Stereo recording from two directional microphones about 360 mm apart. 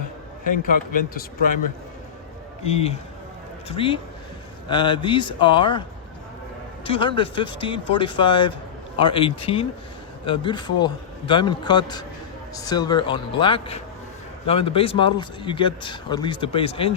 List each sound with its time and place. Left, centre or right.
0.5 s speech: left
2.6 s speech: centre
6.8 s speech: centre